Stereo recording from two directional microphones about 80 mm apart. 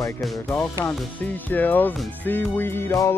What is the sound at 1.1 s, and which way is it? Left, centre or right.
Speech, left.